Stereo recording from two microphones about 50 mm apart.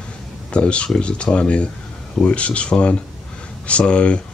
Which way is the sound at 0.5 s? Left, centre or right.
Left.